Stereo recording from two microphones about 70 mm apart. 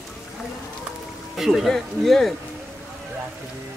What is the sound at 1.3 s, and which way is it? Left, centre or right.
Speech, centre.